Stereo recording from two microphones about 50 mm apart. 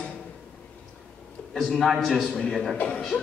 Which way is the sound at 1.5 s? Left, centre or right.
Centre.